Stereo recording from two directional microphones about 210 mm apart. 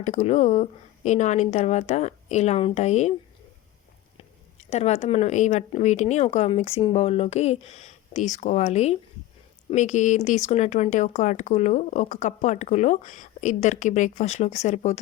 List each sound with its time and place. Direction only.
0.0 s speech: 35° left (ahead or behind)
4.7 s speech: 30° left (ahead or behind)